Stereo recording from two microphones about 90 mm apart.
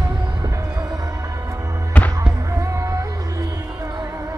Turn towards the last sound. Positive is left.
turn(degrees=-35)  # may be behind; listen again after turning